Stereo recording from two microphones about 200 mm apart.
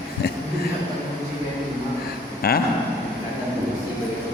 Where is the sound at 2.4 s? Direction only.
50° left (ahead or behind).